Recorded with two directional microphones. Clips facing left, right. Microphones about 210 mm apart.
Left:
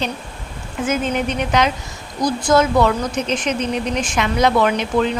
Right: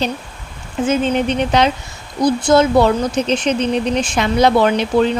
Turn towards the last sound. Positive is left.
turn(degrees=-30)  # may be behind; listen again after turning